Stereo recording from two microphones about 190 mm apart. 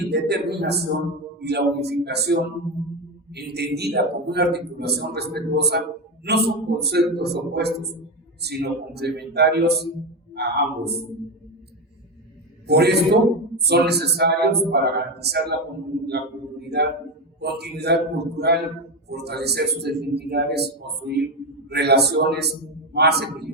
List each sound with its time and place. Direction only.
0.1 s a man's voice: 60° right (ahead or behind)
12.6 s a man's voice: 60° right (ahead or behind)